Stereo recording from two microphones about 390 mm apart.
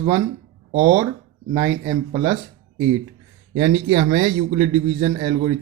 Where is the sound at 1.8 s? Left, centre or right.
Centre.